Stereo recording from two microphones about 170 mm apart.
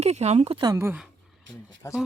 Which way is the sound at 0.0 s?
40° right (ahead or behind).